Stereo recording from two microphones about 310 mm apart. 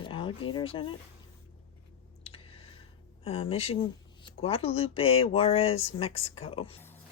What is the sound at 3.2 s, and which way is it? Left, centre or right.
Speech, centre.